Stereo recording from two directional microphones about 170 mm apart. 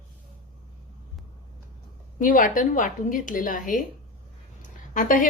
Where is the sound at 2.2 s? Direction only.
50° left (ahead or behind).